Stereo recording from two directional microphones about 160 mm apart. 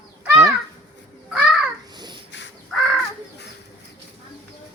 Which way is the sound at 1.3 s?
5° right (ahead or behind).